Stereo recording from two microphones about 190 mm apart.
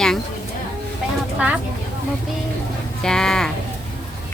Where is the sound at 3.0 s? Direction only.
5° left (ahead or behind).